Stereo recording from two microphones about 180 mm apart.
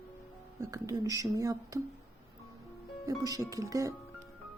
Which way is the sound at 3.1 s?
20° right (ahead or behind).